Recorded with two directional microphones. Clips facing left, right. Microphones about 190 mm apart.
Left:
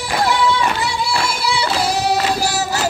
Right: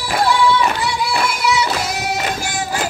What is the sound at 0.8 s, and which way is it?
Singing, 30° left (ahead or behind).